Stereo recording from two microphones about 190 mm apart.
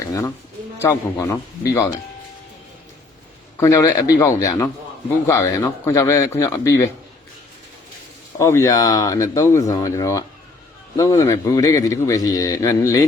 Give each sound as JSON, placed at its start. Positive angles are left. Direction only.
{"t": 0.1, "sound": "a man's voice", "side_deg": 20}
{"t": 3.6, "sound": "a man's voice", "side_deg": 20}
{"t": 8.4, "sound": "a man's voice", "side_deg": 15}